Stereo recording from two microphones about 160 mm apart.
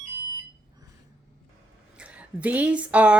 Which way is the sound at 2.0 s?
10° right (ahead or behind).